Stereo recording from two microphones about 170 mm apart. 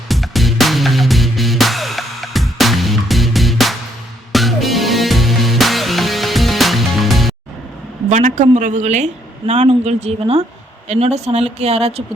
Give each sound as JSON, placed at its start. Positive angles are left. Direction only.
{"t": 0.1, "sound": "music", "side_deg": 0}
{"t": 8.1, "sound": "a woman's voice", "side_deg": -45}